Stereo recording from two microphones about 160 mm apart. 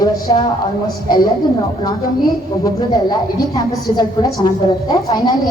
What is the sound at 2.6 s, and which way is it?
A man's voice, 25° left (ahead or behind).